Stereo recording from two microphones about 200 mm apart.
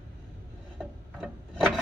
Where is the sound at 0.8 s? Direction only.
Centre (ahead or behind).